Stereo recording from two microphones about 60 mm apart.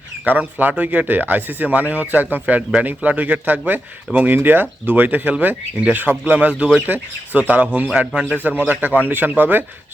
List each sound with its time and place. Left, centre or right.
0.3 s speech: right